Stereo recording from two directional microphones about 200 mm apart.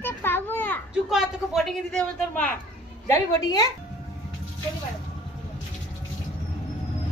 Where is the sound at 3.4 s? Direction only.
20° left (ahead or behind).